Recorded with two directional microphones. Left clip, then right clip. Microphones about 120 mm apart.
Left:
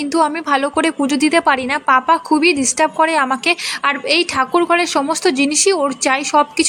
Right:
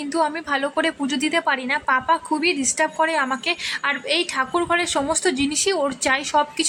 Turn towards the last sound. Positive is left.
turn(degrees=30)  # may be behind; listen again after turning